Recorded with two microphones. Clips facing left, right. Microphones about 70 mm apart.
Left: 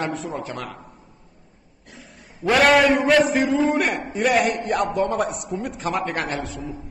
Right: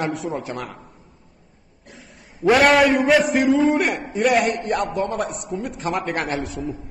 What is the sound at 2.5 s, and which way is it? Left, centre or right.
A man's voice, centre.